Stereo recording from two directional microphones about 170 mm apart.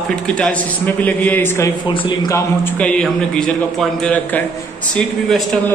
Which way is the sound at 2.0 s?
25° left (ahead or behind).